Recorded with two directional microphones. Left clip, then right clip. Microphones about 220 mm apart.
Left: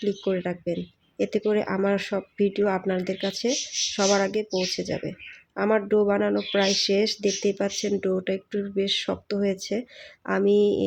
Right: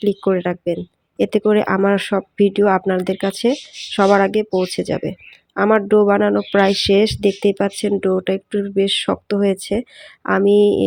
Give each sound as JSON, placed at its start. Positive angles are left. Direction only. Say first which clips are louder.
{"t": 0.0, "sound": "speech", "louder": "right 9 dB", "side_deg": -25}